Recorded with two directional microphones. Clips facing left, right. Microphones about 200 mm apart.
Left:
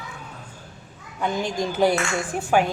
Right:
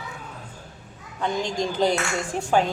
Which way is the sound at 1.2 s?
5° left (ahead or behind).